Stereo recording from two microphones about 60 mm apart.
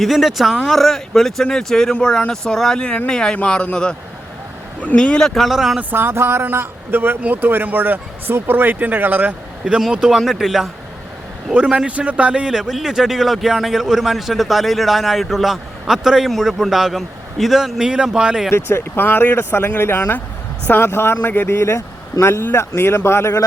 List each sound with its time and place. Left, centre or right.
0.0 s speech: centre
4.9 s speech: centre
5.9 s speech: right
9.9 s speech: centre
11.5 s a man's voice: centre
18.5 s speech: left